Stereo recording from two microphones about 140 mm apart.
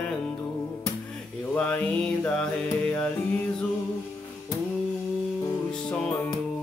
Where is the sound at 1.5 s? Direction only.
10° left (ahead or behind).